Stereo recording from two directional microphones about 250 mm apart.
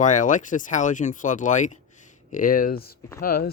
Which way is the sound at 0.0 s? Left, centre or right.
Left.